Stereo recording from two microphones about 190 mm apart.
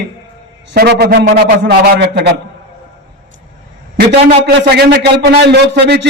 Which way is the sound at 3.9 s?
55° right (ahead or behind).